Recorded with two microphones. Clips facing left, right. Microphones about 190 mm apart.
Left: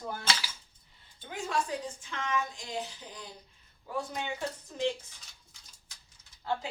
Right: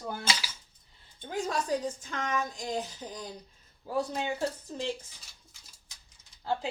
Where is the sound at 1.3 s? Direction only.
40° right (ahead or behind).